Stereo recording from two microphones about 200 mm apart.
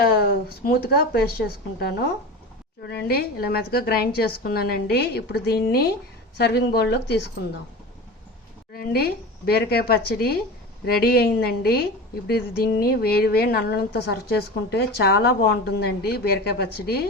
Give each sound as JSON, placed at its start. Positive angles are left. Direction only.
{"t": 0.0, "sound": "a woman's voice", "side_deg": 50}
{"t": 8.7, "sound": "a woman's voice", "side_deg": 50}